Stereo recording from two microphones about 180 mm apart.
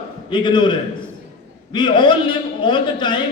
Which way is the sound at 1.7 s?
25° left (ahead or behind).